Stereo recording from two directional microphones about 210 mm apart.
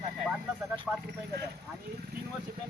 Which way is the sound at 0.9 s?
Centre (ahead or behind).